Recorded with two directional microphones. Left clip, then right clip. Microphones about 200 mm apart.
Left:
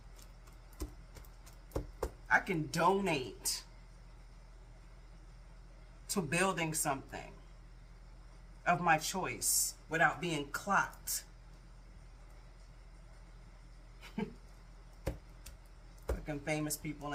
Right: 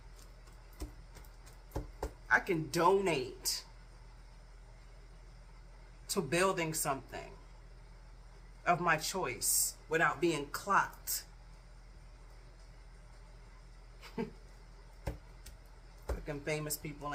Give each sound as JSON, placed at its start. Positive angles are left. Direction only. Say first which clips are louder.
{"t": 2.3, "sound": "speech", "louder": "right 1 dB", "side_deg": -20}
{"t": 6.1, "sound": "speech", "louder": "right 2 dB", "side_deg": -15}
{"t": 8.6, "sound": "speech", "louder": "even", "side_deg": -20}
{"t": 16.2, "sound": "speech", "louder": "even", "side_deg": -20}